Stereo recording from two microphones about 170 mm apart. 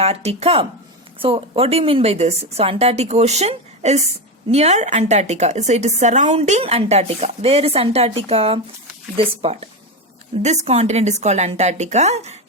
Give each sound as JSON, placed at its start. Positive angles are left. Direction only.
{"t": 0.0, "sound": "a woman's voice", "side_deg": -35}